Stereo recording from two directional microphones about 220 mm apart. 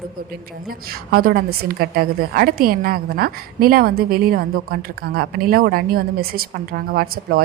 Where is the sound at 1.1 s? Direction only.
40° right (ahead or behind).